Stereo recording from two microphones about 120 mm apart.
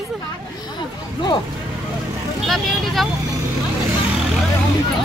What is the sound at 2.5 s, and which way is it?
Speech, centre (ahead or behind).